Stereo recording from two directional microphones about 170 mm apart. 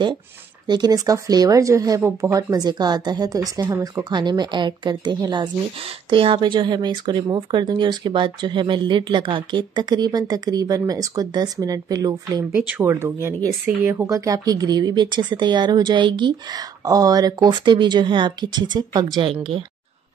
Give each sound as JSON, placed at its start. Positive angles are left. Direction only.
{"t": 0.7, "sound": "speech", "side_deg": -25}